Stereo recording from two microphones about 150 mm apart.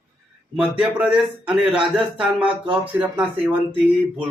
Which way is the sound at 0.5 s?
5° right (ahead or behind).